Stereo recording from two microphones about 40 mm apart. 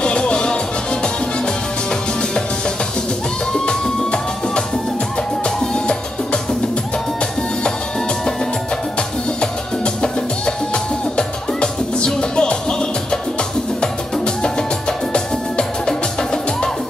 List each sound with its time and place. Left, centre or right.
0.0 s music: left
3.6 s music: left
10.0 s music: centre
13.7 s music: left